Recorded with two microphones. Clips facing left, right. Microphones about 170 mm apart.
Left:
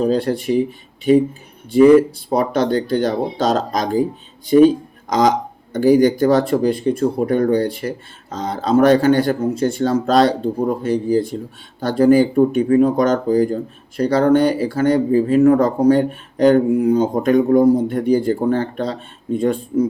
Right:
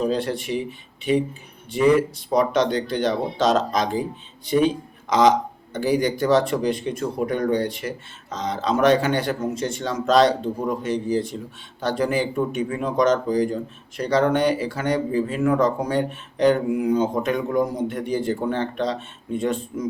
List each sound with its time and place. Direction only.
0.0 s speech: 35° left (ahead or behind)
5.7 s speech: 45° left (ahead or behind)
11.3 s speech: 50° left (ahead or behind)
11.8 s speech: 40° left (ahead or behind)
16.8 s speech: 35° left (ahead or behind)